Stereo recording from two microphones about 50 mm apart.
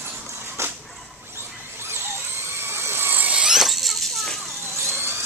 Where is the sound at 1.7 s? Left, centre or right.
Right.